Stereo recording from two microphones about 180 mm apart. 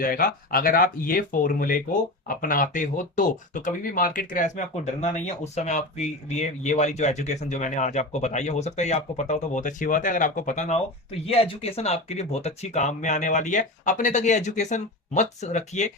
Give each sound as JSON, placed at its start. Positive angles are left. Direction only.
{"t": 0.0, "sound": "speech", "side_deg": 55}